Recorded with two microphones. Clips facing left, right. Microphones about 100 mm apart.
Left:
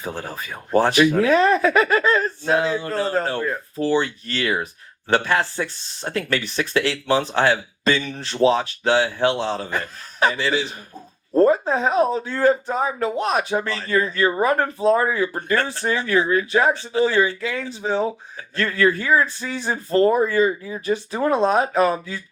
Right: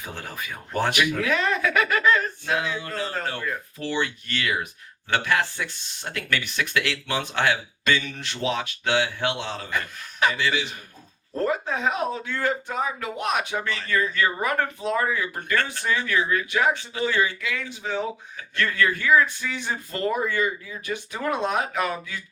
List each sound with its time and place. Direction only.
0.0 s speech: 35° left (ahead or behind)